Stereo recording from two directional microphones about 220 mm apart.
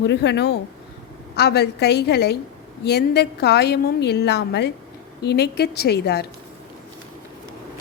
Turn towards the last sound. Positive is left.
turn(degrees=45)  # may be behind; listen again after turning